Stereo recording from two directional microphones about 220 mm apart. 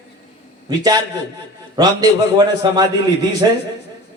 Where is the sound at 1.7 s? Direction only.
20° right (ahead or behind).